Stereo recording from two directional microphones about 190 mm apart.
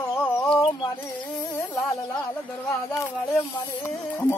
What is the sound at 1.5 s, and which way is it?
Speech, 15° left (ahead or behind).